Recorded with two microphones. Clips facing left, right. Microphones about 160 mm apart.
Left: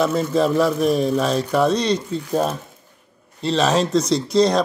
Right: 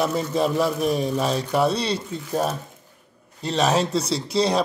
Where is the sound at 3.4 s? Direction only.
15° right (ahead or behind).